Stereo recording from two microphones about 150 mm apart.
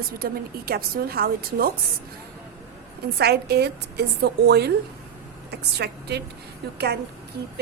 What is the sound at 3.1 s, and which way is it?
A woman's voice, 90° right.